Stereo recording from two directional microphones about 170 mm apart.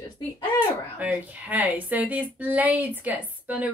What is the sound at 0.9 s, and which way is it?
Speech, 10° right (ahead or behind).